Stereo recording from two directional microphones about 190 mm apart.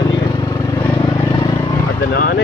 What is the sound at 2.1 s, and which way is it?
Vehicle, 60° left (ahead or behind).